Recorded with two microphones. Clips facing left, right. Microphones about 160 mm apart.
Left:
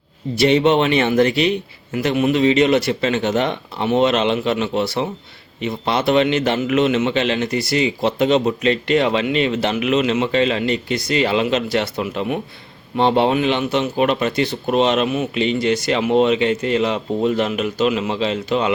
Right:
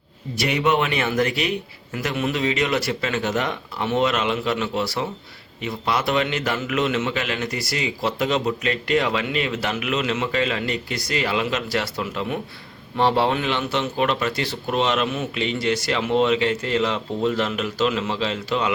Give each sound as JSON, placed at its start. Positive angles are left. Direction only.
{"t": 0.3, "sound": "a man's voice", "side_deg": 30}